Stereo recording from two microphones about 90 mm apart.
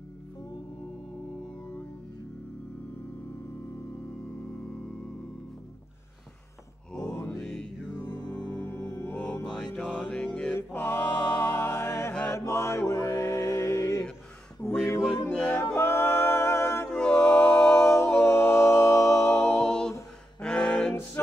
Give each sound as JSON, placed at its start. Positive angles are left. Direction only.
{"t": 6.9, "sound": "mantra", "side_deg": 10}
{"t": 9.5, "sound": "mantra", "side_deg": 10}
{"t": 12.1, "sound": "mantra", "side_deg": 15}
{"t": 12.4, "sound": "music", "side_deg": 30}
{"t": 15.2, "sound": "music", "side_deg": 10}
{"t": 15.7, "sound": "a capella", "side_deg": 30}
{"t": 16.9, "sound": "music", "side_deg": 10}
{"t": 18.2, "sound": "music", "side_deg": 30}
{"t": 19.4, "sound": "music", "side_deg": 10}